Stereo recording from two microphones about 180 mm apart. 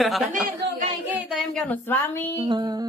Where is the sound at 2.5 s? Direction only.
25° right (ahead or behind).